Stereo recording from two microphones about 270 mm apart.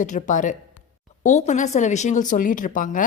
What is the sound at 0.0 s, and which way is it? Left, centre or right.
Speech, left.